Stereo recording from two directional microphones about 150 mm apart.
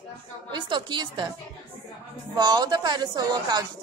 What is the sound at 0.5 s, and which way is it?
Speech, 30° right (ahead or behind).